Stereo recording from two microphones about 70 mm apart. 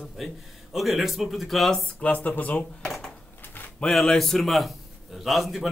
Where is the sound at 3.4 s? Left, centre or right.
Left.